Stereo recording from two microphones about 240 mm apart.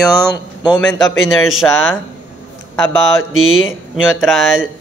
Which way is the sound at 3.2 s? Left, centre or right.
Left.